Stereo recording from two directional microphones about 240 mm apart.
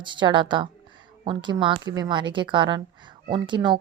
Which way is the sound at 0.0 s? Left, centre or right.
Centre.